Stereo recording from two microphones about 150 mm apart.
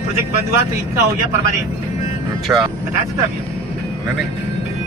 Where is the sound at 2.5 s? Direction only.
15° right (ahead or behind).